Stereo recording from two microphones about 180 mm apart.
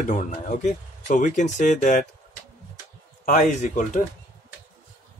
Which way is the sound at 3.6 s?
45° left (ahead or behind).